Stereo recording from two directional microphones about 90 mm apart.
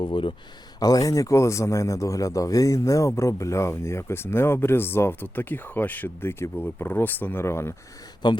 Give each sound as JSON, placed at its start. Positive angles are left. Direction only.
{"t": 0.0, "sound": "speech", "side_deg": 75}
{"t": 0.8, "sound": "speech", "side_deg": 40}
{"t": 8.2, "sound": "a man's voice", "side_deg": 55}